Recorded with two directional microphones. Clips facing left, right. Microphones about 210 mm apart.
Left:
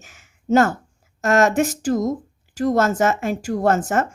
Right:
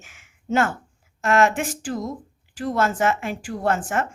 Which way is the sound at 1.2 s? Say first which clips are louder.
Left 3 dB; 40° left (ahead or behind).